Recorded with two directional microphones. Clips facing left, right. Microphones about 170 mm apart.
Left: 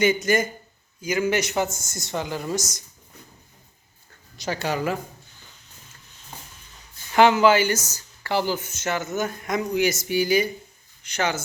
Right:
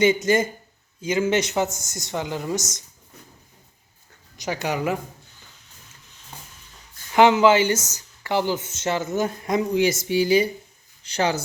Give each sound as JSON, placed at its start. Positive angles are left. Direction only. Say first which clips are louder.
{"t": 0.0, "sound": "speech", "louder": "right 2 dB", "side_deg": -25}
{"t": 4.4, "sound": "speech", "louder": "even", "side_deg": -15}
{"t": 7.1, "sound": "speech", "louder": "right 1 dB", "side_deg": -20}